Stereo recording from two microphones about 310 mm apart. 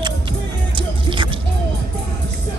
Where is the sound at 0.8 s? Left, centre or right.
Centre.